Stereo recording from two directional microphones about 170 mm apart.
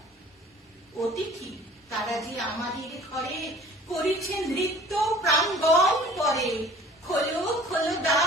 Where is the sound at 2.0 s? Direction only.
Centre (ahead or behind).